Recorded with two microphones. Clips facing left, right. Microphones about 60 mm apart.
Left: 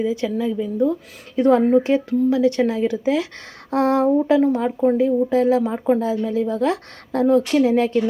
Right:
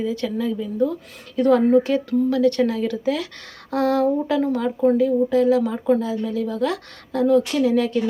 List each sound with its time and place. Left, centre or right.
0.0 s speech: centre; by 7.9 s left